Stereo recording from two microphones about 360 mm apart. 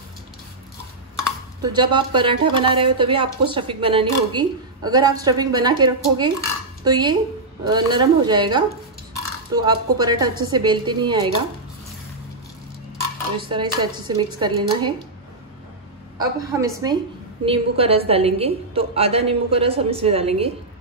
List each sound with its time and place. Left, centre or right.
1.6 s speech: centre
13.4 s speech: centre
16.2 s speech: centre